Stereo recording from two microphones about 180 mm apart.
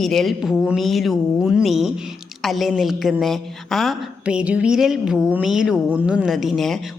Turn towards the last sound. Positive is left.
turn(degrees=0)  # may be behind; listen again after turning